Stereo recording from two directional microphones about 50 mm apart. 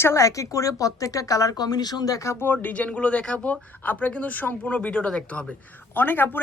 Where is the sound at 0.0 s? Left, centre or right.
Left.